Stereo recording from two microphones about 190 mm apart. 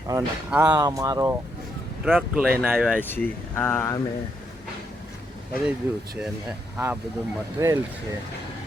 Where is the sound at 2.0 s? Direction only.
5° left (ahead or behind).